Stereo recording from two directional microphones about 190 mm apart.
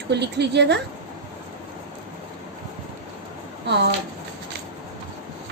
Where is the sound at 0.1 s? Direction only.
60° right (ahead or behind).